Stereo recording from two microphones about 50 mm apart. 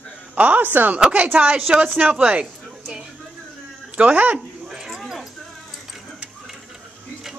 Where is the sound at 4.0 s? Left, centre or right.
Right.